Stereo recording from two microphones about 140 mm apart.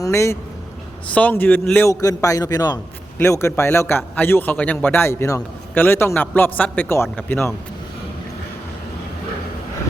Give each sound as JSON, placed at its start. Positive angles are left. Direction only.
{"t": 0.0, "sound": "a man's voice", "side_deg": 20}
{"t": 1.9, "sound": "a man's voice", "side_deg": 25}